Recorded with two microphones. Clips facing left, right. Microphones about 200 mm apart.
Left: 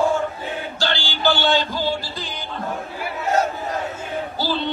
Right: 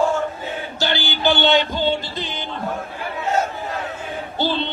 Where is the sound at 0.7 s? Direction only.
20° right (ahead or behind).